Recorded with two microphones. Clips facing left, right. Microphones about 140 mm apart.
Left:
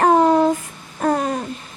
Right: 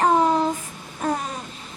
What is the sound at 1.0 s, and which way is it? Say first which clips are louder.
Babbling: left 6 dB; 60° left (ahead or behind).